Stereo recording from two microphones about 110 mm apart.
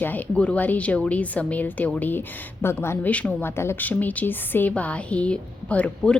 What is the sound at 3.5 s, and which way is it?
A woman's voice, 25° left (ahead or behind).